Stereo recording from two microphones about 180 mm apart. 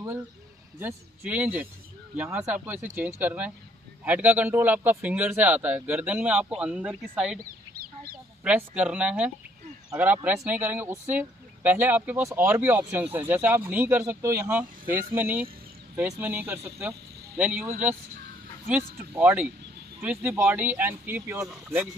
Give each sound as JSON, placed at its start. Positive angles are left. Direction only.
{"t": 0.7, "sound": "speech", "side_deg": -10}
{"t": 7.4, "sound": "chicken", "side_deg": -55}
{"t": 8.5, "sound": "speech", "side_deg": -5}
{"t": 19.1, "sound": "speech", "side_deg": -10}